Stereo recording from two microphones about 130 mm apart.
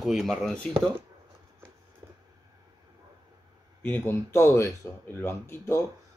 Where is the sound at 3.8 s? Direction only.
15° left (ahead or behind).